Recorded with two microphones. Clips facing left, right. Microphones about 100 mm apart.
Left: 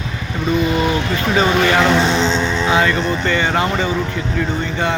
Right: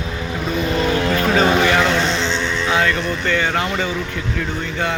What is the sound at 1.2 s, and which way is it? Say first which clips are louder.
Speech: left 1 dB; 5° left (ahead or behind).